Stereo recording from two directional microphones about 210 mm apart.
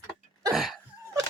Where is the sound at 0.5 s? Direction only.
Centre (ahead or behind).